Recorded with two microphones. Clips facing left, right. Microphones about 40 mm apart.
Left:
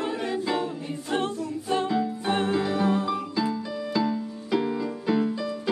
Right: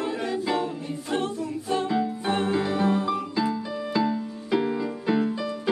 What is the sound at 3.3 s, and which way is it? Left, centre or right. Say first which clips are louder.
Music: right 1 dB; centre.